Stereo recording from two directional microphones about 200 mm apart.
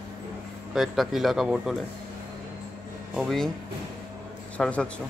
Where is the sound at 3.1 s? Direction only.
Centre (ahead or behind).